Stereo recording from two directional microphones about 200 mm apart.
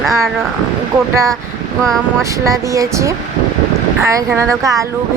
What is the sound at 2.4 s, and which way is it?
Speech, 15° right (ahead or behind).